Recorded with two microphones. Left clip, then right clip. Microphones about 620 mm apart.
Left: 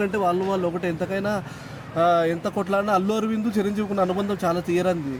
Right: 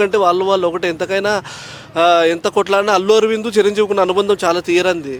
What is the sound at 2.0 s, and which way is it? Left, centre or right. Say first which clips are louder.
Speech: right 8 dB; right.